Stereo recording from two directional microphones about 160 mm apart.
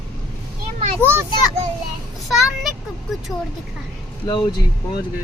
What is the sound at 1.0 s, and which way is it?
Speech, 15° right (ahead or behind).